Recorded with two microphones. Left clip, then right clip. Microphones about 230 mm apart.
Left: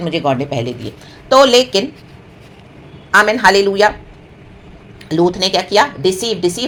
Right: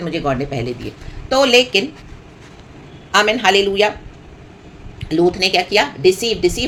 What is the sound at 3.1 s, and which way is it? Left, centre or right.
Speech, centre.